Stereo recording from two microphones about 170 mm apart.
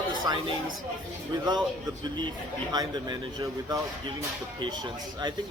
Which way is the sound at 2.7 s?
25° right (ahead or behind).